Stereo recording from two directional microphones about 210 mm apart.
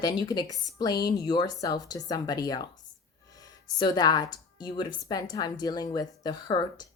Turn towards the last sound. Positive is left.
turn(degrees=20)  # may be behind; listen again after turning